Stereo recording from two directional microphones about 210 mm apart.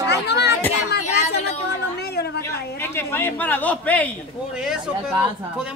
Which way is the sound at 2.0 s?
50° left (ahead or behind).